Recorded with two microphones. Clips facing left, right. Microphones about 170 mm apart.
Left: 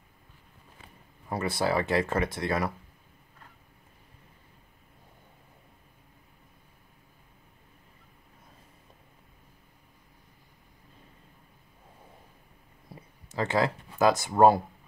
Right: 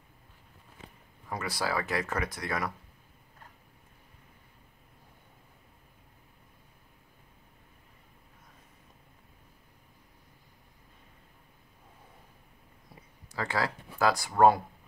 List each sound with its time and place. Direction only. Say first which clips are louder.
1.3 s speech: left 5 dB; 25° left (ahead or behind)
13.3 s speech: left 5 dB; 20° left (ahead or behind)